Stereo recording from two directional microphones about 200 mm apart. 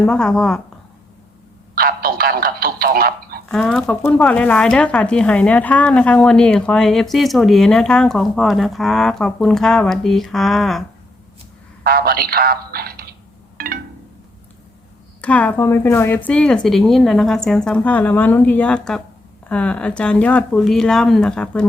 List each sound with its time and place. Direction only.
0.0 s speech: 5° left (ahead or behind)
1.7 s speech: 45° right (ahead or behind)
3.5 s speech: centre (ahead or behind)
11.8 s a man's voice: 50° right (ahead or behind)
15.2 s speech: 5° left (ahead or behind)